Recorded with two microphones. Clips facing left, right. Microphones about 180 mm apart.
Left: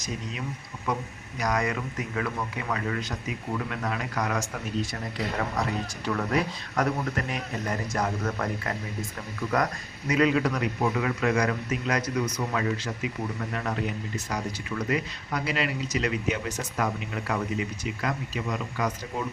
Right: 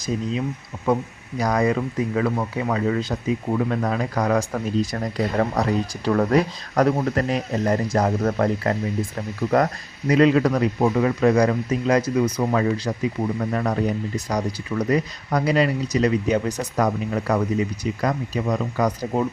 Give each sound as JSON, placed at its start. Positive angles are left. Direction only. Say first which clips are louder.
{"t": 1.4, "sound": "speech", "louder": "right 7 dB", "side_deg": -30}
{"t": 12.4, "sound": "speech", "louder": "right 7 dB", "side_deg": -40}